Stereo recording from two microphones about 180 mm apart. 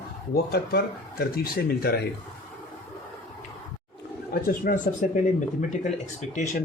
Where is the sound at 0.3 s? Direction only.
60° left (ahead or behind).